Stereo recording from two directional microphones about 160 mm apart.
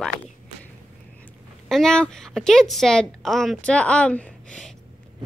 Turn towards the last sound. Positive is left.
turn(degrees=5)  # may be behind; listen again after turning